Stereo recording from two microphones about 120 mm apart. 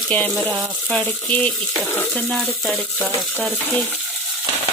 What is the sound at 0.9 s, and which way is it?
Speech, 5° left (ahead or behind).